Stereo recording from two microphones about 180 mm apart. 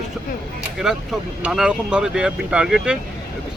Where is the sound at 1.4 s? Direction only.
5° right (ahead or behind).